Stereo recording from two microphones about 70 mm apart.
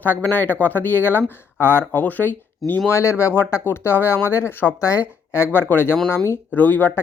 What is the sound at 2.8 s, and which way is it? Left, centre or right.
Speech, left.